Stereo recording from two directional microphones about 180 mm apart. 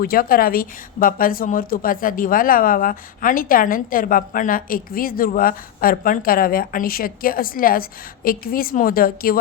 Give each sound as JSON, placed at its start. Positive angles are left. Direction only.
{"t": 0.0, "sound": "a woman's voice", "side_deg": 55}